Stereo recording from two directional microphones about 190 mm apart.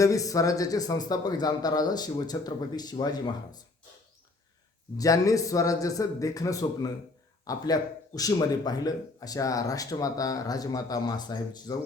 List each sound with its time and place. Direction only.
0.0 s speech: 15° left (ahead or behind)
4.9 s a man's voice: 20° left (ahead or behind)